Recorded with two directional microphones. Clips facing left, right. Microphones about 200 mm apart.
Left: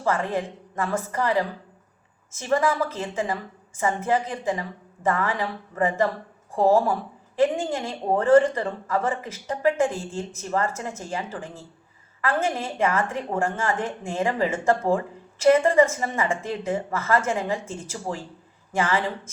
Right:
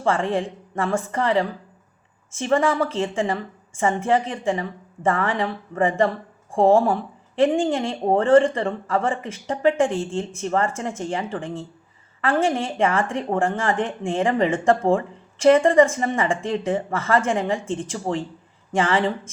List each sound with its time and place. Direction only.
0.0 s a woman's voice: 30° right (ahead or behind)